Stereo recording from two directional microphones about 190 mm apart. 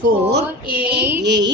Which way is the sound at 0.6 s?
5° right (ahead or behind).